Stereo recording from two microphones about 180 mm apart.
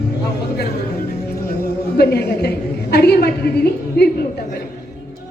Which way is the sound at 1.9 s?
65° left (ahead or behind).